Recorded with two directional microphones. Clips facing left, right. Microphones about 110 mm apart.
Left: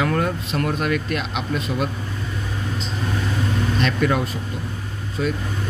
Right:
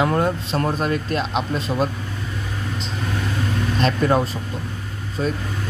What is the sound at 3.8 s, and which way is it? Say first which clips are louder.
A man's voice: right 3 dB; 35° right (ahead or behind).